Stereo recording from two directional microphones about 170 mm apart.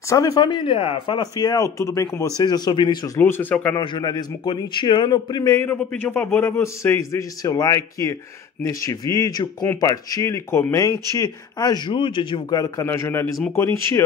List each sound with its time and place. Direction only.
0.1 s speech: 20° left (ahead or behind)
3.2 s speech: 15° left (ahead or behind)
3.7 s speech: 25° left (ahead or behind)